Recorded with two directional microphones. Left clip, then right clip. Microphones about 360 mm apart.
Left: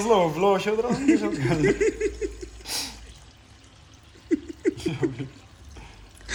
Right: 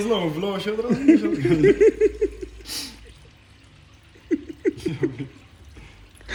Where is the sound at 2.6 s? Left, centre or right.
Left.